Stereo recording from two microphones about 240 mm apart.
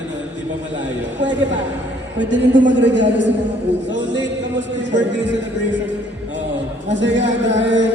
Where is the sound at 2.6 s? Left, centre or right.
Right.